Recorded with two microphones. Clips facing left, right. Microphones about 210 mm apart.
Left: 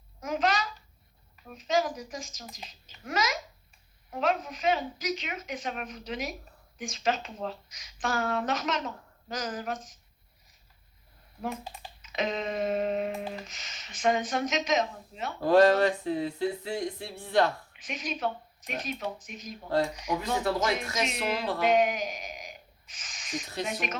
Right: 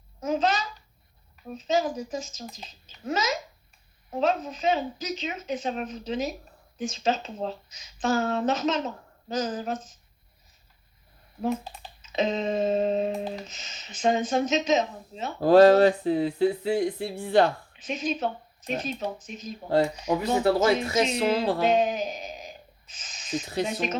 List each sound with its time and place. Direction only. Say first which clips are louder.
0.2 s a child's voice: right 3 dB; 25° right (ahead or behind)
12.0 s speech: right 5 dB; 25° right (ahead or behind)